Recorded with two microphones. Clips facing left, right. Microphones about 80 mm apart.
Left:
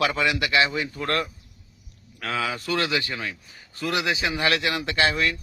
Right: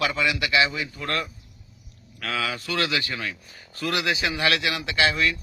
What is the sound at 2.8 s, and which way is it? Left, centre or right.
Speech, left.